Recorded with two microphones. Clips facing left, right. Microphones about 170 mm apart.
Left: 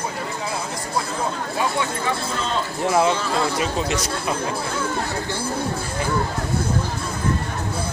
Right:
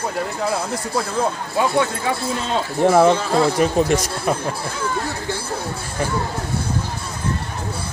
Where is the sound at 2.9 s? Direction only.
50° right (ahead or behind).